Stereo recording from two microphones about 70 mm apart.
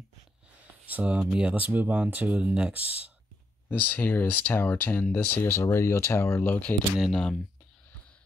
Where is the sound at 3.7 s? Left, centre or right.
Left.